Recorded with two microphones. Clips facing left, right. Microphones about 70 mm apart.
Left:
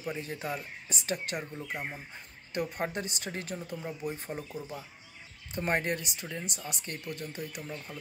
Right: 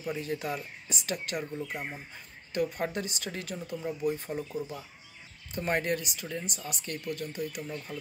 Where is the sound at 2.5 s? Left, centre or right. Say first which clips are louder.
Right 2 dB; left.